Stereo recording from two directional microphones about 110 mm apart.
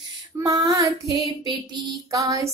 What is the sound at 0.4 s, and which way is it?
Female singing, 35° right (ahead or behind).